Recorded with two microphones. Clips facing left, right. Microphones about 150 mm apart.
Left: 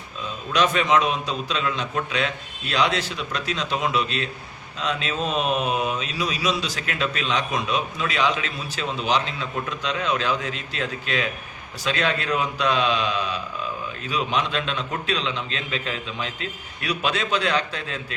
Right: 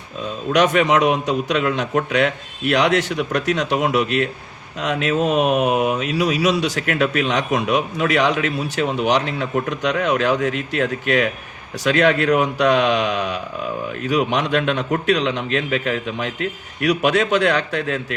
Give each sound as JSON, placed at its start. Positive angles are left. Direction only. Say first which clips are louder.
{"t": 0.5, "sound": "speech", "louder": "right 4 dB", "side_deg": -60}